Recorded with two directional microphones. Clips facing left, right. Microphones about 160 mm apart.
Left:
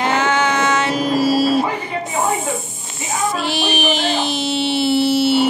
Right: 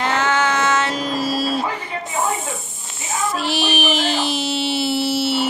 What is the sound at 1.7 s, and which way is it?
Snake, 20° left (ahead or behind).